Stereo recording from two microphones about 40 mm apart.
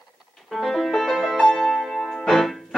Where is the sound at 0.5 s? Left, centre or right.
Centre.